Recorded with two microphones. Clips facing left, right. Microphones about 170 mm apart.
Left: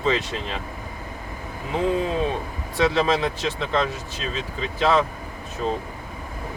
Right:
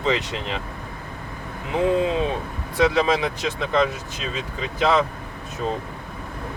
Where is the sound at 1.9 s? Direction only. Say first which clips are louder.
Right 3 dB; 20° right (ahead or behind).